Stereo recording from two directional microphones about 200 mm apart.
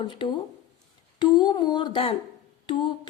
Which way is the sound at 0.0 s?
25° left (ahead or behind).